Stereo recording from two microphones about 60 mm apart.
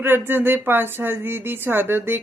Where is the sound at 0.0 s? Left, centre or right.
Right.